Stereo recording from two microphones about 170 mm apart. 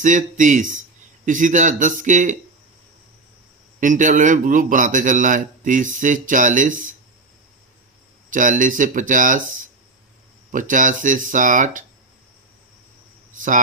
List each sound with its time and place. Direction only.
0.0 s a man's voice: 45° right (ahead or behind)
3.8 s a man's voice: 50° right (ahead or behind)
8.3 s a man's voice: 50° right (ahead or behind)
10.5 s a man's voice: 50° right (ahead or behind)